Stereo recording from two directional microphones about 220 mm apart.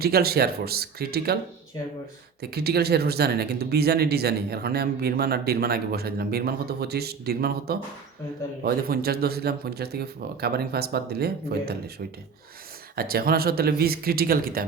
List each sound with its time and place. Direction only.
0.0 s speech: 45° right (ahead or behind)
2.4 s speech: 45° right (ahead or behind)
13.0 s speech: 45° right (ahead or behind)